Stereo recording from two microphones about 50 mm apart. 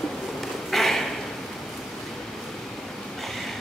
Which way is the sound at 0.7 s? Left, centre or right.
Centre.